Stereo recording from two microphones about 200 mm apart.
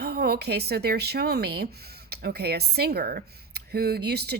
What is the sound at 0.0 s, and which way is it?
Speech, 55° right (ahead or behind).